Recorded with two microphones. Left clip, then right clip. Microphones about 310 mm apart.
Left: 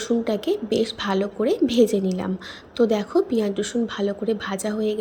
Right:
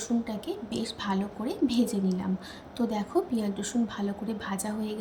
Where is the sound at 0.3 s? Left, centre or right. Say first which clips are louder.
Left 12 dB; centre.